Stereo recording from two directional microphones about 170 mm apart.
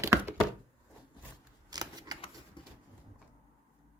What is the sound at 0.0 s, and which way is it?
Chopping, 15° right (ahead or behind).